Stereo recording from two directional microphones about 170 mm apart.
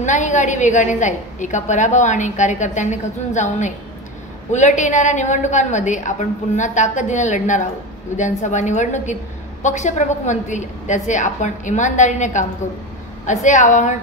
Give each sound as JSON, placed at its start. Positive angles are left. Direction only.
{"t": 0.0, "sound": "a woman's voice", "side_deg": 45}